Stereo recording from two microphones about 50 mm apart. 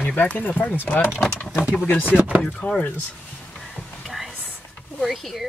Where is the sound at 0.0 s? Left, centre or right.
Left.